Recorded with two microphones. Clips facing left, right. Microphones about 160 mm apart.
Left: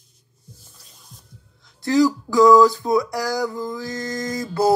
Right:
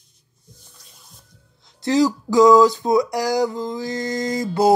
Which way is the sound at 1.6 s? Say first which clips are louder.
Even; 20° right (ahead or behind).